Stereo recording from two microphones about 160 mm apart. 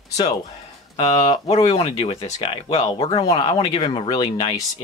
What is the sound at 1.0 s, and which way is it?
Speech, 40° left (ahead or behind).